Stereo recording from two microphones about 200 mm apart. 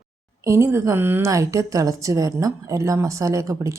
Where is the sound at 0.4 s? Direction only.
15° right (ahead or behind).